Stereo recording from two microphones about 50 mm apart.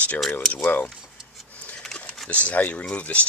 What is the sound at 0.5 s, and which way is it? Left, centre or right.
Speech, left.